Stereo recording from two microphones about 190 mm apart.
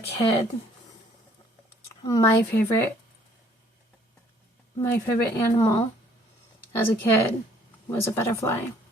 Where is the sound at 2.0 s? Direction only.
15° left (ahead or behind).